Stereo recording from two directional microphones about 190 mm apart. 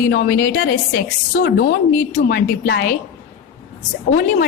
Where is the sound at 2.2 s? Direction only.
60° left (ahead or behind).